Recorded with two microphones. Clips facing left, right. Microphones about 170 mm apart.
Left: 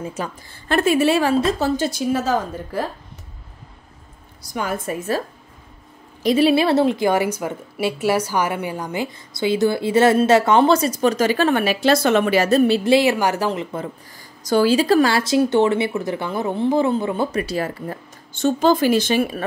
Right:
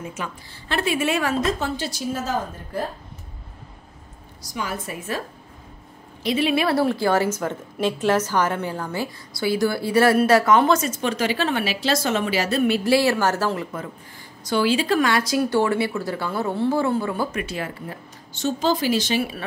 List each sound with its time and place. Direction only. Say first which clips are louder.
0.0 s speech: left 4 dB; 35° left (ahead or behind)
0.7 s speech: left 6 dB; 45° left (ahead or behind); by 1.7 s 30° left (ahead or behind)
1.8 s a woman's voice: left 6 dB; 55° left (ahead or behind); by 2.8 s 75° left (ahead or behind)
4.4 s speech: left 4 dB; 50° left (ahead or behind)
6.2 s a woman's voice: left 5 dB; 40° left (ahead or behind)
12.6 s a woman's voice: left 3 dB; 25° left (ahead or behind)
14.4 s a woman's voice: left 5 dB; 40° left (ahead or behind); by 17.3 s 20° left (ahead or behind)
17.3 s speech: left 5 dB; 35° left (ahead or behind)